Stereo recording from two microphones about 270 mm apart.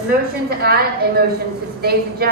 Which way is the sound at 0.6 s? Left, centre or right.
Right.